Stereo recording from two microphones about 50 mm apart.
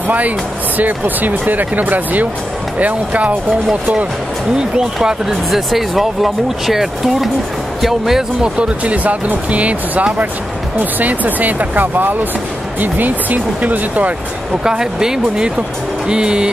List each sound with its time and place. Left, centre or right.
0.7 s speech: right
5.0 s speech: centre
5.5 s speech: centre
8.5 s speech: right
14.6 s speech: centre